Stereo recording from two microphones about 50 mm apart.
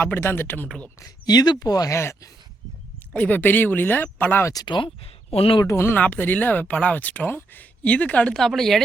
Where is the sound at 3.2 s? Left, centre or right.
Left.